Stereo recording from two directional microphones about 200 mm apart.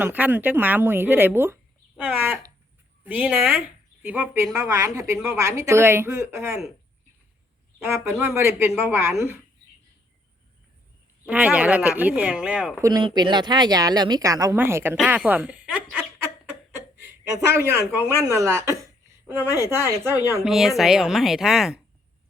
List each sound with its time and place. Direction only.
0.0 s speech: 10° right (ahead or behind)
2.0 s a sound: 10° right (ahead or behind)
3.0 s speech: 10° right (ahead or behind)
7.9 s speech: 15° right (ahead or behind)
11.3 s speech: 5° right (ahead or behind)
12.8 s speech: 20° right (ahead or behind)
14.9 s a sound: 5° right (ahead or behind)
16.7 s speech: 10° right (ahead or behind)